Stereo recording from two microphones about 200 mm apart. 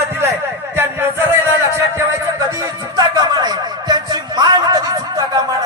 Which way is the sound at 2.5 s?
15° right (ahead or behind).